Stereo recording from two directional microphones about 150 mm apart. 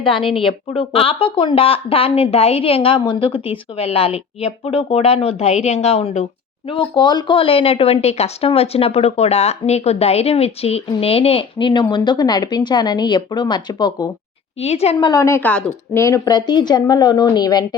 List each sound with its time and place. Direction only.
0.0 s speech: 35° left (ahead or behind)
6.7 s speech: 30° left (ahead or behind)
14.6 s a woman's voice: 45° left (ahead or behind)
15.1 s a woman's voice: 20° left (ahead or behind)